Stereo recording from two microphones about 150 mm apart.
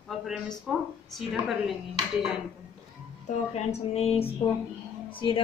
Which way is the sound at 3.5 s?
45° left (ahead or behind).